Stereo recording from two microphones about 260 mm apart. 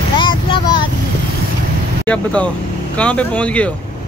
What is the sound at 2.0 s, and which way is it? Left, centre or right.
Speech, centre.